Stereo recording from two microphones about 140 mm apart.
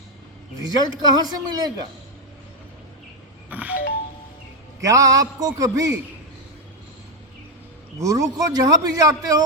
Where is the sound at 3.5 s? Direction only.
10° right (ahead or behind).